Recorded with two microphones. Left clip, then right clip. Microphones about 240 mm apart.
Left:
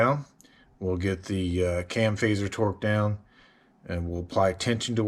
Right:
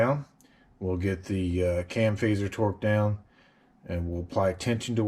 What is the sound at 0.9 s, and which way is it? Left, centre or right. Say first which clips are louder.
Speech: left 1 dB; centre.